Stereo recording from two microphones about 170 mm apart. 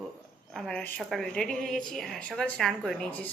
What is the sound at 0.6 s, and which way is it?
A woman's voice, 5° left (ahead or behind).